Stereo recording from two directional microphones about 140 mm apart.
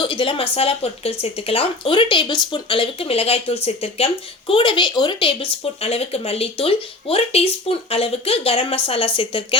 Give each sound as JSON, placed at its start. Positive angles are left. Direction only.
{"t": 0.0, "sound": "speech", "side_deg": 35}